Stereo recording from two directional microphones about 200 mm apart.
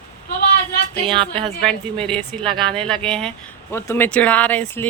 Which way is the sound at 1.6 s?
5° left (ahead or behind).